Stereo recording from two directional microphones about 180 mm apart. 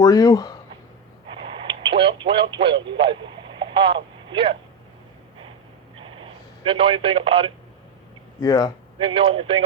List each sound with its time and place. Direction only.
0.0 s speech: 20° left (ahead or behind)
1.5 s radio: 25° right (ahead or behind)
6.0 s telephone: 30° right (ahead or behind)
8.4 s speech: 20° left (ahead or behind)
9.0 s speech: 30° right (ahead or behind)